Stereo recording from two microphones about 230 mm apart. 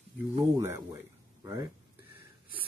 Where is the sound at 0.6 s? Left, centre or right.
Centre.